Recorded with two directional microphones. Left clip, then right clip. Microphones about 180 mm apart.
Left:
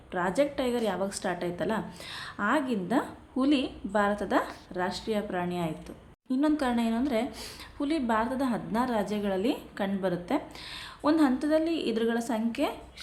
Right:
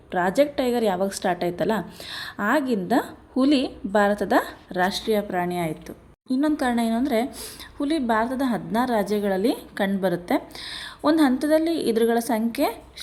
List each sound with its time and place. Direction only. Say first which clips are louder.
0.1 s a woman's voice: right 7 dB; 30° right (ahead or behind)
4.8 s a woman's voice: right 8 dB; 45° right (ahead or behind)